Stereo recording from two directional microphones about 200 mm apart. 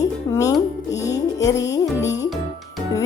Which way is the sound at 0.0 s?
15° left (ahead or behind).